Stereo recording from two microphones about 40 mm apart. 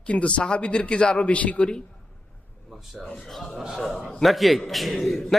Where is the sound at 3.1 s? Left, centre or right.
Centre.